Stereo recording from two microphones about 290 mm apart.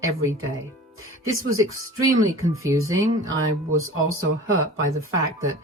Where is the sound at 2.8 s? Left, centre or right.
Right.